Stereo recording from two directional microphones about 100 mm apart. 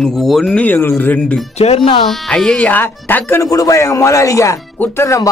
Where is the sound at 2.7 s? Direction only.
20° left (ahead or behind).